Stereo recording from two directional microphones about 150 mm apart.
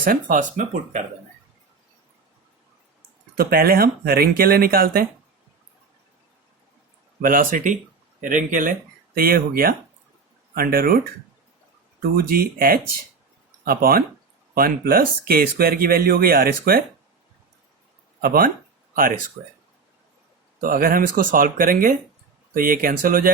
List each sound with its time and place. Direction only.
0.0 s speech: 65° right (ahead or behind)
3.3 s speech: 90° right
7.2 s speech: 65° right (ahead or behind)
9.1 s speech: 80° right
12.1 s speech: 85° right
18.2 s speech: 80° right
19.4 s speech: 45° right (ahead or behind)
20.6 s speech: 70° right (ahead or behind)